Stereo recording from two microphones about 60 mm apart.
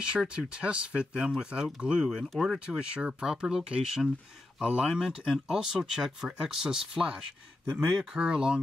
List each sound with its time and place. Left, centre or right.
0.1 s speech: centre
7.8 s speech: centre